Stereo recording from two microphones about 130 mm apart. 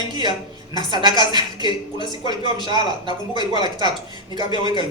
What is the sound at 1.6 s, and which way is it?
Speech, 35° left (ahead or behind).